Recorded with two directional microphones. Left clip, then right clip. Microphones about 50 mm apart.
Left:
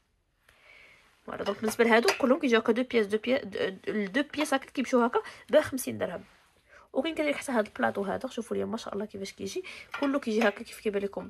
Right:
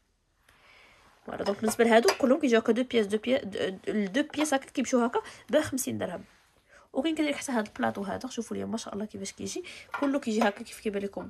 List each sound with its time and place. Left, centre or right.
0.7 s a sound: right
2.2 s speech: right
5.2 s speech: right
7.0 s speech: right